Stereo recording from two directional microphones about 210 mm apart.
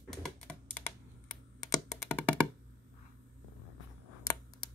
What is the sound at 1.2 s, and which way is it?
Computer keyboard, 15° left (ahead or behind).